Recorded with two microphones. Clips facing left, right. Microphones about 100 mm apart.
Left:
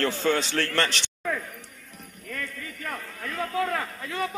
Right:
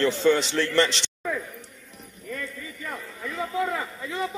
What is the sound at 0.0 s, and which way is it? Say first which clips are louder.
Speech: right 4 dB; 70° left (ahead or behind).